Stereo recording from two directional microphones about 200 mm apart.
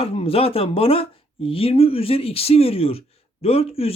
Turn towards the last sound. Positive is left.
turn(degrees=30)  # may be behind; listen again after turning